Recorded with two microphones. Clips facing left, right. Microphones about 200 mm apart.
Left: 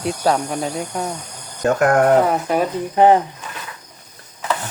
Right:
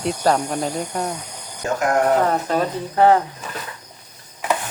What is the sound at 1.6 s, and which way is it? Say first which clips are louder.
Speech: left 5 dB; 55° left (ahead or behind).